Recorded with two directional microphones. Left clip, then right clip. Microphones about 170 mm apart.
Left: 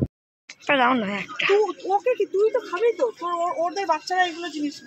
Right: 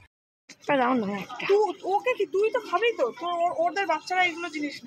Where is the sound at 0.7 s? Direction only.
Centre (ahead or behind).